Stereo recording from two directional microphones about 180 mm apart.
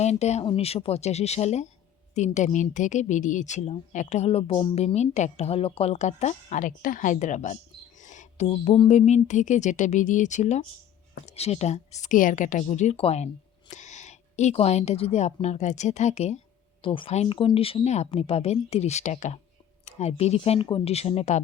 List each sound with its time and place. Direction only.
0.0 s a woman's voice: 40° left (ahead or behind)